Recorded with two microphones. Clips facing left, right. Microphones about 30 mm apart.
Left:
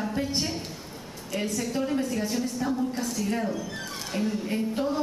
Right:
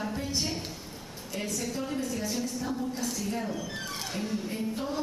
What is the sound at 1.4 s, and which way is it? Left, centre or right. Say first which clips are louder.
Speech: left 4 dB; centre.